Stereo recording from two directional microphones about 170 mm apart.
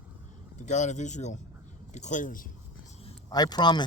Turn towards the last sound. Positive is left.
turn(degrees=25)  # may be behind; listen again after turning